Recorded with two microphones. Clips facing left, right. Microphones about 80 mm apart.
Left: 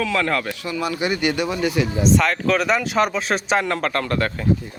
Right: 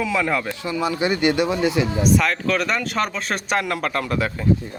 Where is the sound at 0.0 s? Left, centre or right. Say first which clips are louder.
Even; centre.